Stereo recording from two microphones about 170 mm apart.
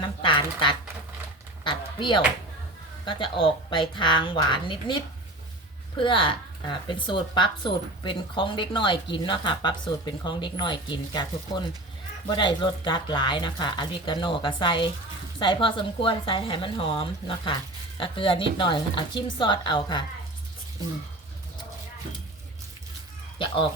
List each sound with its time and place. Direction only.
0.2 s a woman's voice: 30° left (ahead or behind)